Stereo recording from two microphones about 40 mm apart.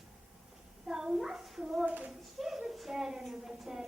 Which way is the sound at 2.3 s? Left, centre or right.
Centre.